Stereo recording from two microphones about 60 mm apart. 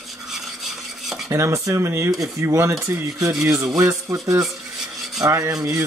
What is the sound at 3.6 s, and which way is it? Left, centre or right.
Speech, right.